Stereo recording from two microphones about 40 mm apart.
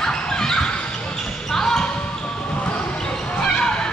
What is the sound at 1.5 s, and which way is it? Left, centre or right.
Basketball bounce, centre.